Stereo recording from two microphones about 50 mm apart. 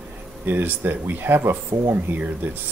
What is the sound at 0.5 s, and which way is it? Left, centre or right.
Speech, right.